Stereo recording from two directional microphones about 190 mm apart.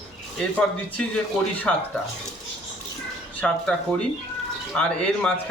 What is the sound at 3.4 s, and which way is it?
A man's voice, 5° left (ahead or behind).